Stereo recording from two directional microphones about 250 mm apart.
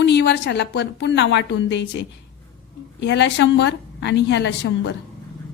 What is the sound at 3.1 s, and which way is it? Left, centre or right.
A woman's voice, left.